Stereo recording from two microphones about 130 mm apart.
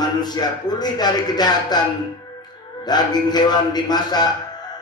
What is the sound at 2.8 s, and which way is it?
Speech, 30° left (ahead or behind).